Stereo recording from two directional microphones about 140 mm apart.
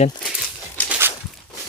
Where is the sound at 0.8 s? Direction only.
10° left (ahead or behind).